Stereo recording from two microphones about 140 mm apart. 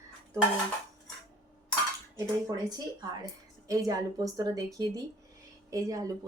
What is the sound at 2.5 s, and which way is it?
Speech, 30° right (ahead or behind).